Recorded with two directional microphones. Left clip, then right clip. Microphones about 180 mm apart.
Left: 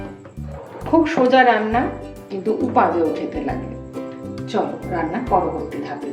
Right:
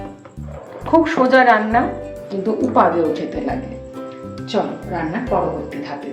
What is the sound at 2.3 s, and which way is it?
Speech, 20° right (ahead or behind).